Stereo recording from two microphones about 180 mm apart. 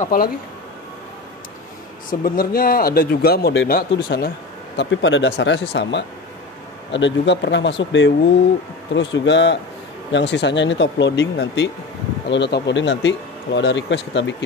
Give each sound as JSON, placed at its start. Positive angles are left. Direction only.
{"t": 0.0, "sound": "speech", "side_deg": 50}
{"t": 2.0, "sound": "speech", "side_deg": 55}
{"t": 4.7, "sound": "speech", "side_deg": 85}